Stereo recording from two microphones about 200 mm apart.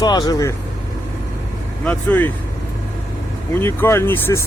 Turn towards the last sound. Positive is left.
turn(degrees=10)  # may be behind; listen again after turning